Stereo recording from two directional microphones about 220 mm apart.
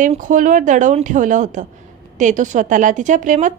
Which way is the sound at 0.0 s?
35° right (ahead or behind).